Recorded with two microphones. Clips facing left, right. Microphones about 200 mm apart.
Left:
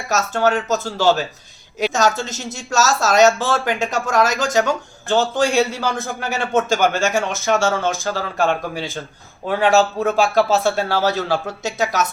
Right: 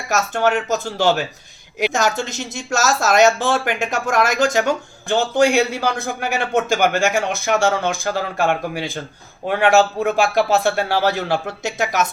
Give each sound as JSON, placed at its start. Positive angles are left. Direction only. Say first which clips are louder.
{"t": 0.1, "sound": "a man's voice", "louder": "even", "side_deg": -15}